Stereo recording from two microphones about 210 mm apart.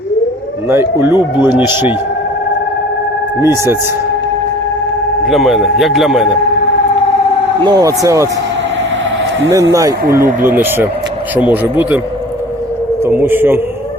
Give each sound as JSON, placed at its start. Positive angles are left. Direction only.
{"t": 0.7, "sound": "speech", "side_deg": -10}
{"t": 3.4, "sound": "speech", "side_deg": -15}
{"t": 5.3, "sound": "speech", "side_deg": 0}
{"t": 7.6, "sound": "speech", "side_deg": -20}
{"t": 10.4, "sound": "speech", "side_deg": -10}
{"t": 13.1, "sound": "speech", "side_deg": -10}